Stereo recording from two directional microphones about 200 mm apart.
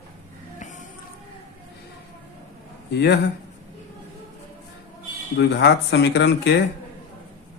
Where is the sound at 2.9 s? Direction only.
55° left (ahead or behind).